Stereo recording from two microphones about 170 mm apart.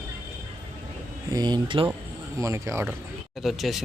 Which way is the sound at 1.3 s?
25° right (ahead or behind).